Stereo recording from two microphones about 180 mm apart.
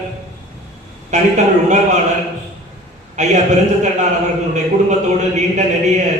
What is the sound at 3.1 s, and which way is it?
Speech, 40° right (ahead or behind).